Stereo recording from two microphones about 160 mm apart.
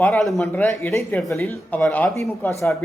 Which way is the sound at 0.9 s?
15° left (ahead or behind).